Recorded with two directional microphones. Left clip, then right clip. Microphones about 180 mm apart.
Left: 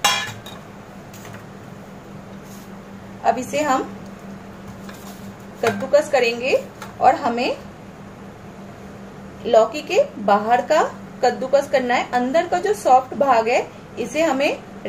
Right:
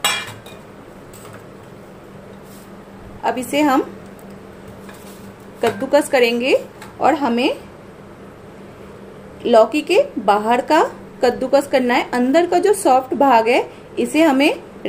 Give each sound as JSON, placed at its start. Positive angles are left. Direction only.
{"t": 3.3, "sound": "speech", "side_deg": -60}
{"t": 5.9, "sound": "speech", "side_deg": -60}
{"t": 9.4, "sound": "speech", "side_deg": -60}